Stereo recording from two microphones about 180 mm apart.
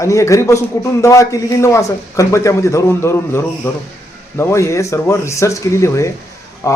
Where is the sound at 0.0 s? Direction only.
15° left (ahead or behind).